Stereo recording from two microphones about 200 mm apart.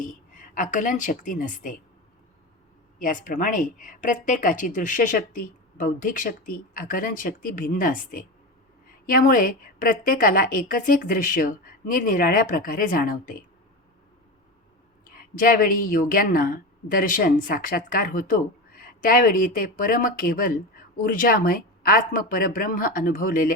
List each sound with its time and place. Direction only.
0.0 s a woman's voice: 40° left (ahead or behind)
3.0 s speech: 40° left (ahead or behind)
15.0 s speech: 45° left (ahead or behind)